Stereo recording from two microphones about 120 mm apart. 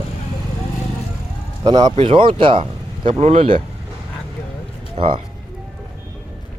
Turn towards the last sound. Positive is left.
turn(degrees=-45)  # may be behind; listen again after turning